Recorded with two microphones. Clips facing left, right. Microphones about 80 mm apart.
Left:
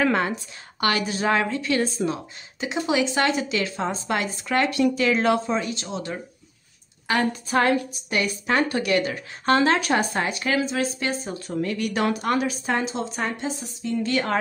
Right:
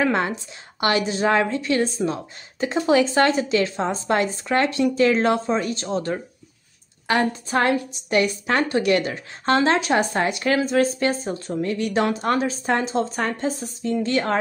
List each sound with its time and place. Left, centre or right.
0.0 s a woman's voice: right